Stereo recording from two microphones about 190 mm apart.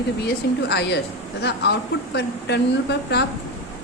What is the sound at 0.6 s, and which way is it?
A woman's voice, 65° left (ahead or behind).